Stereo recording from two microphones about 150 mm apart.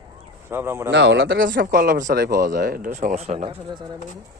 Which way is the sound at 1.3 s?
75° right (ahead or behind).